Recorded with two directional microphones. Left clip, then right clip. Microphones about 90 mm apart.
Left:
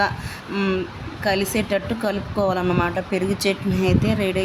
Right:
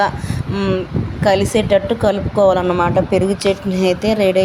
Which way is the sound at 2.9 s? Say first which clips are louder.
Right 9 dB; 35° right (ahead or behind).